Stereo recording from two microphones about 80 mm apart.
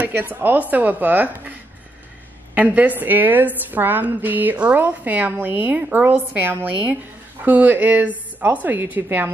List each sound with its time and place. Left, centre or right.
0.0 s a woman's voice: right